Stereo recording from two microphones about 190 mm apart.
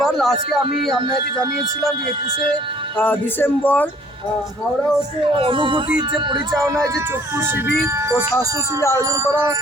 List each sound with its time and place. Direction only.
0.0 s speech: centre (ahead or behind)
3.0 s speech: 10° left (ahead or behind)
5.4 s speech: 25° right (ahead or behind)